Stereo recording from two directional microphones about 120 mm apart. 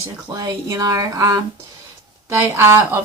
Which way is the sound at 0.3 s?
30° right (ahead or behind).